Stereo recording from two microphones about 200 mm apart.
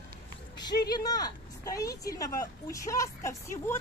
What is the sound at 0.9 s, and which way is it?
Speech, 20° left (ahead or behind).